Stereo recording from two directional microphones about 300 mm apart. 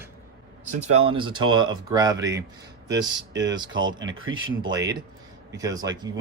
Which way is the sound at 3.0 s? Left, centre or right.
Right.